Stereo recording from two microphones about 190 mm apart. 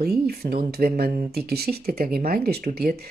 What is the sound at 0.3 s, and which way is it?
Speech, 55° right (ahead or behind).